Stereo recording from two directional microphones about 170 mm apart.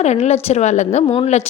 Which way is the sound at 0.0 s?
40° left (ahead or behind).